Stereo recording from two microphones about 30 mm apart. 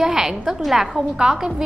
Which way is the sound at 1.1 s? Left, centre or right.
Right.